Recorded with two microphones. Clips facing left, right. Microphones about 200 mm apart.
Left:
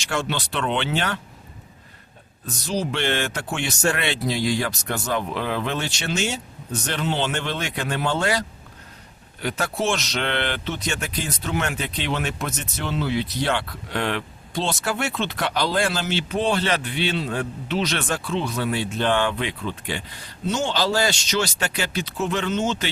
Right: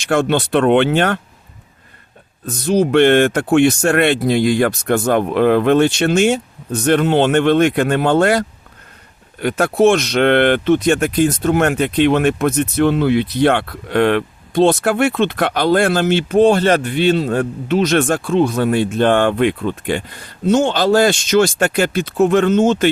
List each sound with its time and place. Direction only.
0.0 s speech: 55° right (ahead or behind)
2.5 s speech: 55° right (ahead or behind)